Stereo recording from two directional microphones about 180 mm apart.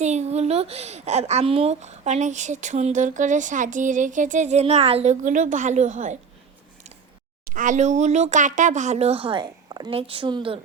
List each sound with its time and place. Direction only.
0.0 s a child's voice: 40° right (ahead or behind)
7.4 s a child's voice: 45° right (ahead or behind); by 10.6 s 30° right (ahead or behind)